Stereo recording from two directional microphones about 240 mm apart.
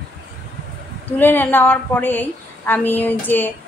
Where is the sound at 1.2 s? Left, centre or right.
Centre.